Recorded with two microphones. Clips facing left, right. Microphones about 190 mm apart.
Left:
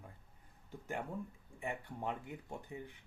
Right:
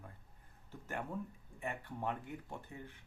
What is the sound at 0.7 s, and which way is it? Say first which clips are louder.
Speech: left 1 dB; 15° left (ahead or behind).